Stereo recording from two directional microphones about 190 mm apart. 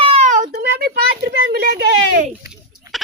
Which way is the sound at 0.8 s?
55° right (ahead or behind).